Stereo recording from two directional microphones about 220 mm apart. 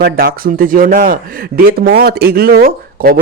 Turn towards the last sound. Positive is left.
turn(degrees=-40)  # may be behind; listen again after turning